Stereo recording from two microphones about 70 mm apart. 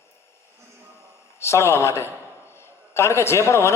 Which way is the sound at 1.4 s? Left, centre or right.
Left.